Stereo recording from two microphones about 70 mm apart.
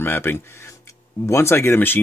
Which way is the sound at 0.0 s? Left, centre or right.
Left.